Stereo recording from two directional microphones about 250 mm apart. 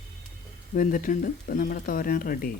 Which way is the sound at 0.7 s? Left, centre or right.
Left.